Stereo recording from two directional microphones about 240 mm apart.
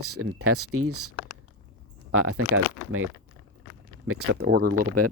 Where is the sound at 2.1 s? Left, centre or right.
Right.